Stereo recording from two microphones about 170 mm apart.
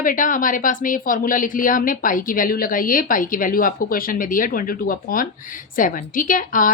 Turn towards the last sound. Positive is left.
turn(degrees=50)  # may be behind; listen again after turning